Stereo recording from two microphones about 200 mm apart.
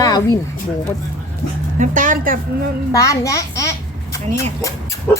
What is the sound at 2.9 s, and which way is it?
A child's voice, 15° left (ahead or behind).